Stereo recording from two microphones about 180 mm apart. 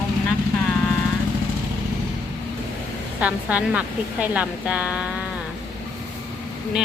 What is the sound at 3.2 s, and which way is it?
Speech, 10° right (ahead or behind).